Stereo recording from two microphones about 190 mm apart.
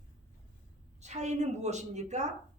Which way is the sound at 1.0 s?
35° right (ahead or behind).